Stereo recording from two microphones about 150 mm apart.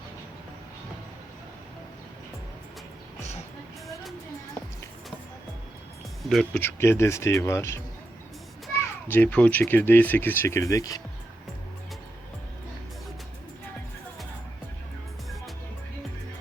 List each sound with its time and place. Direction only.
6.2 s speech: 5° left (ahead or behind)
9.0 s speech: 10° left (ahead or behind)